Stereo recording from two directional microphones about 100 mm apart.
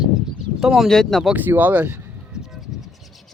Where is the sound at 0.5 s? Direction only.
5° right (ahead or behind).